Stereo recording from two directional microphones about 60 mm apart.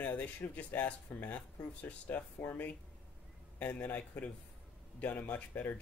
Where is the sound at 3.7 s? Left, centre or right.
Left.